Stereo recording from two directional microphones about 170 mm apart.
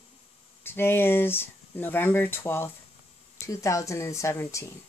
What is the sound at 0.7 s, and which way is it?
Speech, 15° left (ahead or behind).